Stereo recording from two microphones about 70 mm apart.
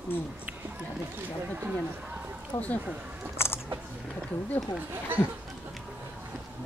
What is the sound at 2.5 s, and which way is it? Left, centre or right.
Speech, left.